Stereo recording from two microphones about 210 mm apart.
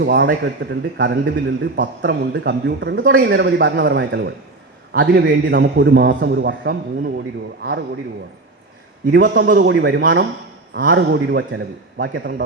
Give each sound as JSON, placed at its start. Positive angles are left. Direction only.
{"t": 0.0, "sound": "a man's voice", "side_deg": -50}
{"t": 9.1, "sound": "a man's voice", "side_deg": -55}